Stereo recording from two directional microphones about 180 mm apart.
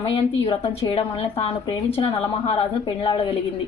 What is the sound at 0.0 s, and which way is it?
Speech, 30° left (ahead or behind).